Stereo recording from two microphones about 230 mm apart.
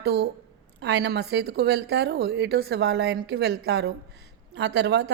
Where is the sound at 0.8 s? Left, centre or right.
Right.